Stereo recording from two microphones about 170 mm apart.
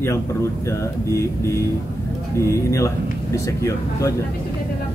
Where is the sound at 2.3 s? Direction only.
15° left (ahead or behind).